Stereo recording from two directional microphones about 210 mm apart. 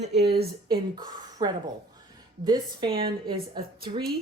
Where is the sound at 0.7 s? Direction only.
20° right (ahead or behind).